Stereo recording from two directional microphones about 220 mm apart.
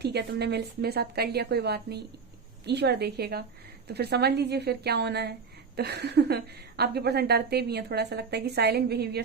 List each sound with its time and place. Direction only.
0.0 s a woman's voice: 50° right (ahead or behind)